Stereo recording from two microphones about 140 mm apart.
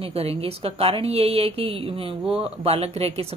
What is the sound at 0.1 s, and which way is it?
Speech, 45° right (ahead or behind).